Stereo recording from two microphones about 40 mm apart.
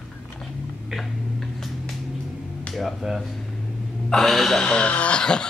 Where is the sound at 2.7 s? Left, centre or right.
Centre.